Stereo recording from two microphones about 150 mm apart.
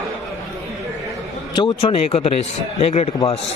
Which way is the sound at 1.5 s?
35° left (ahead or behind).